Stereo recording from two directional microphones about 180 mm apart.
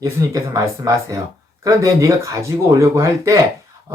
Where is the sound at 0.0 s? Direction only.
20° right (ahead or behind).